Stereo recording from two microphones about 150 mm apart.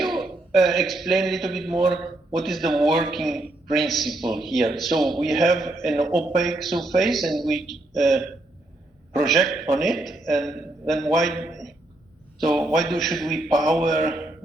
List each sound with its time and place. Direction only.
0.0 s a man's voice: centre (ahead or behind)